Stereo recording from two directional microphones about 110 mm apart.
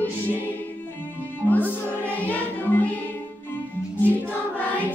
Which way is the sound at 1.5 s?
15° left (ahead or behind).